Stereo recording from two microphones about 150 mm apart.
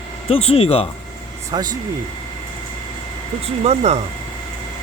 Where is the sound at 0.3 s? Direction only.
40° left (ahead or behind).